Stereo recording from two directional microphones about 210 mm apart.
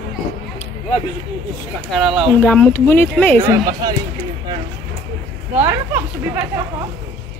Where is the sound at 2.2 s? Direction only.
5° left (ahead or behind).